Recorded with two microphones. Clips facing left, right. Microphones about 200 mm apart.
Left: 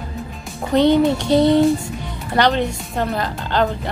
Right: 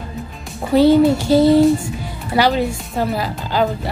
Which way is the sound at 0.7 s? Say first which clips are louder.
Right 3 dB; 5° right (ahead or behind).